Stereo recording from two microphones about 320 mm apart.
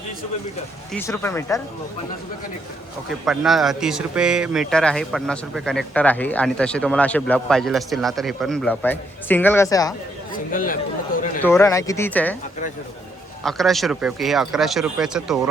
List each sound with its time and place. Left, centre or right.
0.9 s speech: centre
3.2 s speech: centre
10.5 s speech: left
11.4 s speech: centre
13.4 s speech: centre